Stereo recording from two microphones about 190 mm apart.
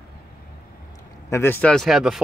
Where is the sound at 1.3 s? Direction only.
10° left (ahead or behind).